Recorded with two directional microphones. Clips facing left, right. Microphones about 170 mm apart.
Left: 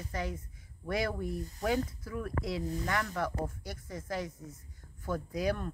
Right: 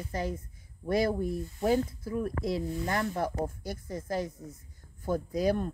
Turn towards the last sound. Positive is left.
turn(degrees=-35)  # may be behind; listen again after turning